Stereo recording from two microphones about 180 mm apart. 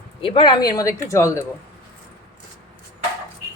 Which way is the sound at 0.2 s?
25° left (ahead or behind).